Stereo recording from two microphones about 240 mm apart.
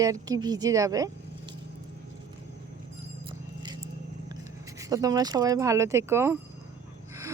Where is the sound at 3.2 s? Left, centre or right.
Centre.